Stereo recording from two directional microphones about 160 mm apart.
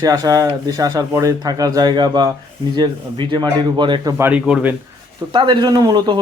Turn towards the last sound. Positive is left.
turn(degrees=-25)  # may be behind; listen again after turning